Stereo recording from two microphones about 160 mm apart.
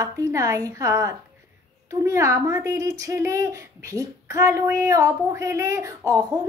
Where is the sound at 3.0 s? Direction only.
20° right (ahead or behind).